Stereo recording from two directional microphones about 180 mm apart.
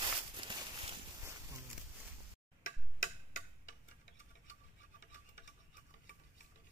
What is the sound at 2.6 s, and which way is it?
Tick-tock, 90° left.